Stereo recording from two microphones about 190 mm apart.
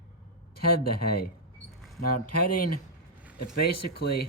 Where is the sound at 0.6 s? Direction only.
55° left (ahead or behind).